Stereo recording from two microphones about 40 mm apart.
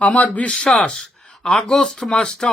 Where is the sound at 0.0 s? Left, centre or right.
Left.